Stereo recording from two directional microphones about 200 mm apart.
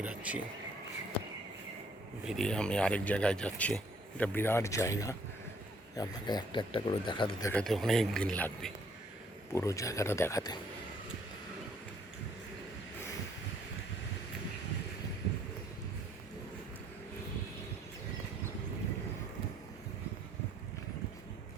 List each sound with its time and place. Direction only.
0.0 s speech: 5° right (ahead or behind)
2.2 s speech: centre (ahead or behind); by 7.5 s 25° left (ahead or behind)
7.5 s speech: centre (ahead or behind); by 10.6 s 15° left (ahead or behind)